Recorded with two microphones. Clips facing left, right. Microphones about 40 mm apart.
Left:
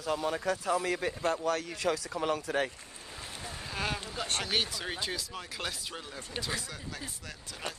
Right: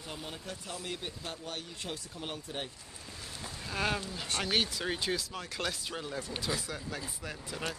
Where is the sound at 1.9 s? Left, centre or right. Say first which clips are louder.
Left 13 dB; left.